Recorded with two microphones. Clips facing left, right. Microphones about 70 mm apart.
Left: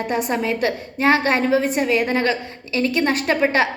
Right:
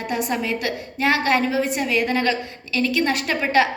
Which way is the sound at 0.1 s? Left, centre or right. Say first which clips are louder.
Left 1 dB; left.